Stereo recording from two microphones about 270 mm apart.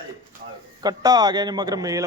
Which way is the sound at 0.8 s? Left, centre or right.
Centre.